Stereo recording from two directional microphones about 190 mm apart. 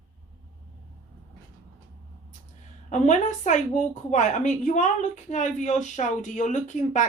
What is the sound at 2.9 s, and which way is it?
A woman's voice, 40° left (ahead or behind).